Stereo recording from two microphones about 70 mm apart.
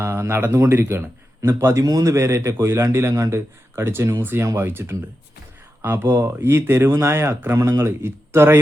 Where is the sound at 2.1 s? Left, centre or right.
Right.